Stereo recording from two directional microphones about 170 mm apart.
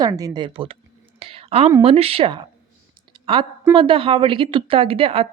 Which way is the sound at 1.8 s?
35° right (ahead or behind).